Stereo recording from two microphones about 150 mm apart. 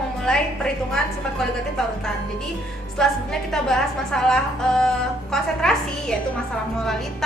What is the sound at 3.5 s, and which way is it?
A woman's voice, 5° left (ahead or behind).